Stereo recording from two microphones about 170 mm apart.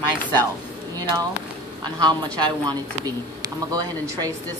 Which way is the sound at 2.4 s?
20° right (ahead or behind).